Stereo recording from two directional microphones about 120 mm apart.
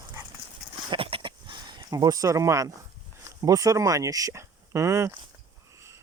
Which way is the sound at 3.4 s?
30° right (ahead or behind).